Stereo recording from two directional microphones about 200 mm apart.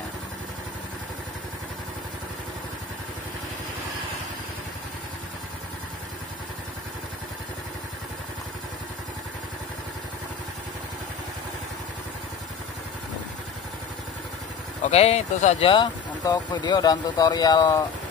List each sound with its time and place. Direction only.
14.9 s speech: 30° left (ahead or behind)